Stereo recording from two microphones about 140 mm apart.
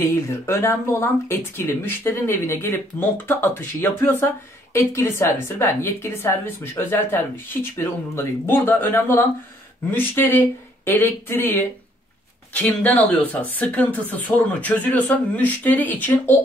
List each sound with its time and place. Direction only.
0.0 s speech: 20° left (ahead or behind)